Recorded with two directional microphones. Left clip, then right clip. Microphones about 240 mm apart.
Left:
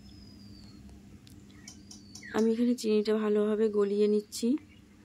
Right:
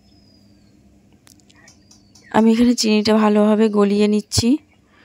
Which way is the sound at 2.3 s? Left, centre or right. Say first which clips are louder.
Right 12 dB; right.